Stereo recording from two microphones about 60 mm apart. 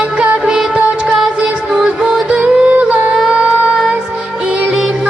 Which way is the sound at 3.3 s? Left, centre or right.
Centre.